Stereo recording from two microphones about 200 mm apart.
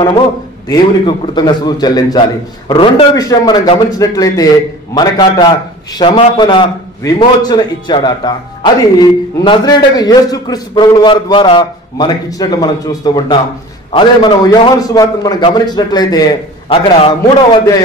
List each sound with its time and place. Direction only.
0.7 s a man's voice: 20° left (ahead or behind)